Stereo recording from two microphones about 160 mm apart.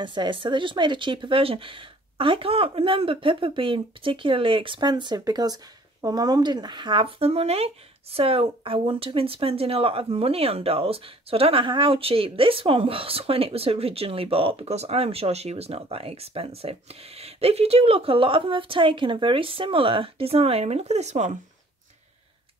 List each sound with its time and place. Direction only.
0.0 s speech: 30° right (ahead or behind); by 21.3 s 45° right (ahead or behind)